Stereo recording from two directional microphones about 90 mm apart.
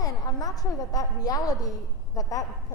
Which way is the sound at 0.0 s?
40° left (ahead or behind).